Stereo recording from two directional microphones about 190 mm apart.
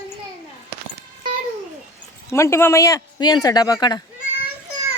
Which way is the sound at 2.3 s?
15° left (ahead or behind).